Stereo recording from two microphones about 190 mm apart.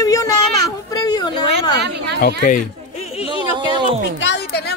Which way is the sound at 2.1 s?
50° left (ahead or behind).